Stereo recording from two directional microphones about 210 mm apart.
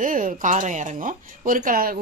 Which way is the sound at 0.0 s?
40° right (ahead or behind).